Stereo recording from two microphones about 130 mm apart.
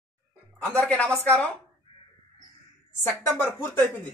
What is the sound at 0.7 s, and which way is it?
Speech, 5° left (ahead or behind).